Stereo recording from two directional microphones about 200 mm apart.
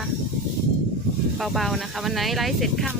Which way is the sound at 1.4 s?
Centre (ahead or behind).